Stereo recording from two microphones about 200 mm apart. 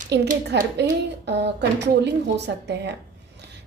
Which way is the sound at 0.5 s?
55° right (ahead or behind).